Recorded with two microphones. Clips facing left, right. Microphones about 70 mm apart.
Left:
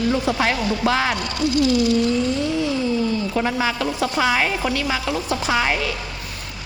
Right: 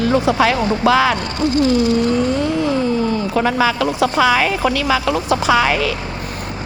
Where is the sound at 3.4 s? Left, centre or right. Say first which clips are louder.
Right 7 dB; right.